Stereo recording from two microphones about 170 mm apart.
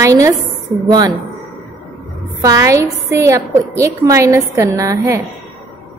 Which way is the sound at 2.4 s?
20° right (ahead or behind).